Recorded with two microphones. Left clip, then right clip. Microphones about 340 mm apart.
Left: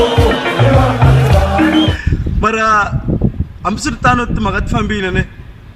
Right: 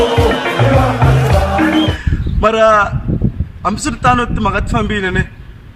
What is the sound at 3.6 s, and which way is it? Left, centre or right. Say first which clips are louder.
Speech: even; centre.